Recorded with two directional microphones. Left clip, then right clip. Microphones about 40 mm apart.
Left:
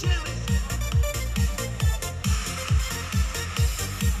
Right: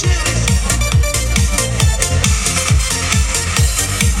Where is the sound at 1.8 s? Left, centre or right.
Left.